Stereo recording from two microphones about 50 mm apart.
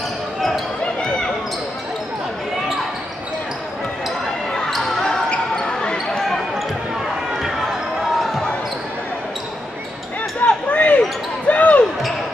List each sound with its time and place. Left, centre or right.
4.5 s basketball bounce: centre
10.4 s a sound: left
11.4 s basketball bounce: left